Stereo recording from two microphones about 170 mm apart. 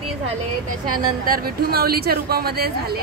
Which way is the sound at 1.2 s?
60° right (ahead or behind).